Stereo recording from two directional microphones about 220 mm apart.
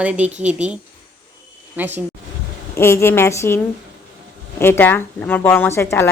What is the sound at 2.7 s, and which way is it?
Speech, 10° left (ahead or behind).